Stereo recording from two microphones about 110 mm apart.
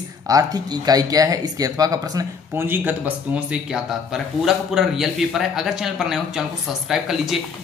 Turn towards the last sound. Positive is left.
turn(degrees=0)  # may be behind; listen again after turning